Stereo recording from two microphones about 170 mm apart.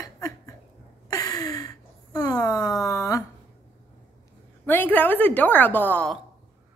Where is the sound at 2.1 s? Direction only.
20° left (ahead or behind).